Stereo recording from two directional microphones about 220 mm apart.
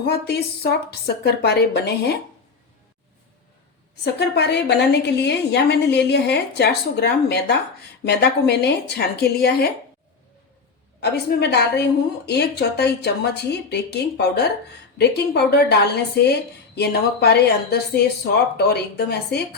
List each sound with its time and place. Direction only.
0.0 s a woman's voice: 45° left (ahead or behind)
4.0 s a woman's voice: 50° left (ahead or behind)
11.0 s a woman's voice: 50° left (ahead or behind)